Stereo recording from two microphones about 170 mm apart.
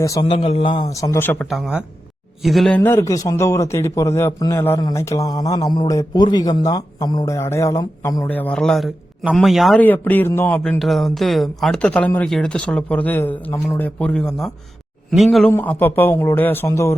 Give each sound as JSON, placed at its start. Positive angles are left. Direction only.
{"t": 0.0, "sound": "a man's voice", "side_deg": 20}
{"t": 0.3, "sound": "a man's voice", "side_deg": 35}
{"t": 1.5, "sound": "a man's voice", "side_deg": 0}
{"t": 8.3, "sound": "a man's voice", "side_deg": 10}
{"t": 9.8, "sound": "a man's voice", "side_deg": 10}